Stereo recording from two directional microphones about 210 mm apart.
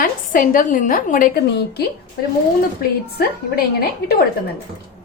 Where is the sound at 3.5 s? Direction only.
50° left (ahead or behind).